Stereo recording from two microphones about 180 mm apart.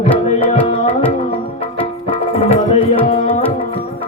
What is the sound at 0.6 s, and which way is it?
Music, 30° left (ahead or behind).